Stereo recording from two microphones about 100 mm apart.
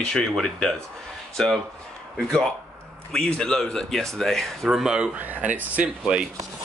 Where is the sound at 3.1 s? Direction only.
10° left (ahead or behind); by 6.2 s 10° right (ahead or behind).